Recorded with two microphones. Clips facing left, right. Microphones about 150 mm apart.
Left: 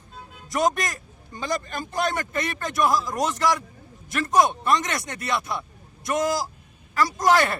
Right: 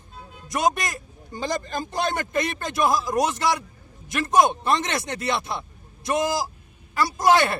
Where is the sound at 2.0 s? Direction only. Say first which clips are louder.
Right 1 dB; 25° right (ahead or behind).